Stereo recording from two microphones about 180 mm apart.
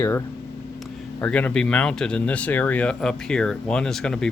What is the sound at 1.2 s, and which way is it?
Speech, 10° left (ahead or behind).